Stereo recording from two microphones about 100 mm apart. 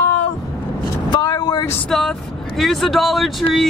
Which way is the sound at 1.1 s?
45° left (ahead or behind).